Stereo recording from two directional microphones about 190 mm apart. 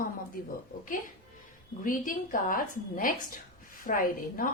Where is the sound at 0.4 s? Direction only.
50° left (ahead or behind).